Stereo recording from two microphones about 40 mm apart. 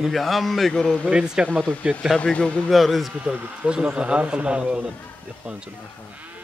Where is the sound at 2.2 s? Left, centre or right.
Left.